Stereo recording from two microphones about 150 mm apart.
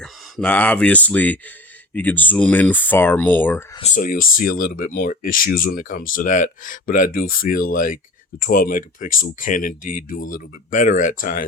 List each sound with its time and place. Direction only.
0.0 s speech: 5° left (ahead or behind)
3.9 s speech: 65° left (ahead or behind)